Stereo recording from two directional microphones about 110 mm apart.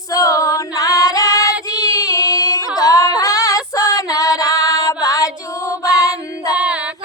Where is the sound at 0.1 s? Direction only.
30° left (ahead or behind).